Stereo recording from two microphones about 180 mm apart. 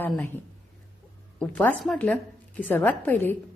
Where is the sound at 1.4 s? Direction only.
5° left (ahead or behind).